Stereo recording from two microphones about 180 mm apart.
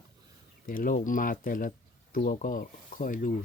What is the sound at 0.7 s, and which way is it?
Speech, 50° left (ahead or behind).